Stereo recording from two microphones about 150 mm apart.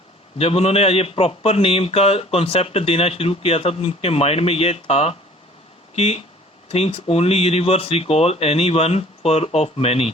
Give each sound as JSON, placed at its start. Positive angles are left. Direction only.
{"t": 0.3, "sound": "a man's voice", "side_deg": 40}